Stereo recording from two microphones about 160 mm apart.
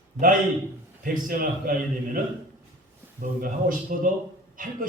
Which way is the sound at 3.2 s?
60° right (ahead or behind).